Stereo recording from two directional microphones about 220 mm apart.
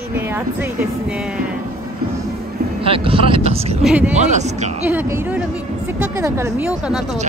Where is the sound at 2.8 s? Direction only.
25° right (ahead or behind).